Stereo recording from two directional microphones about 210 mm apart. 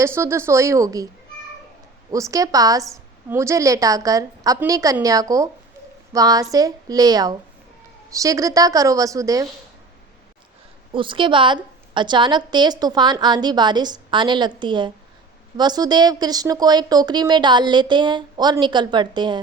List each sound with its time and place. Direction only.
0.0 s a woman's voice: 10° right (ahead or behind)
2.0 s a woman's voice: 15° right (ahead or behind)
10.9 s a woman's voice: 25° right (ahead or behind)